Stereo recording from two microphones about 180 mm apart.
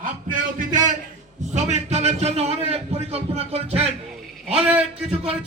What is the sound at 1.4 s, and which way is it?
A man's voice, 40° right (ahead or behind).